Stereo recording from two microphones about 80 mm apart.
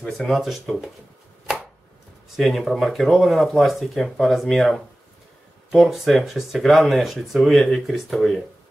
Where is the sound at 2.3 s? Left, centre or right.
Centre.